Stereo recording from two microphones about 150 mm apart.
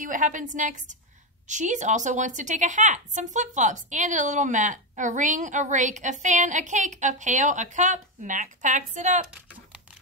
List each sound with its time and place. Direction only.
0.0 s speech: 60° right (ahead or behind)